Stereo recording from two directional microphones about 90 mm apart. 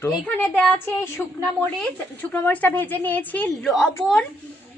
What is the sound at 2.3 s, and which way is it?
Speech, 20° left (ahead or behind).